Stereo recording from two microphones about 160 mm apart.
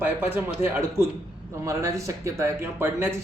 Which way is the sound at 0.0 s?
15° right (ahead or behind).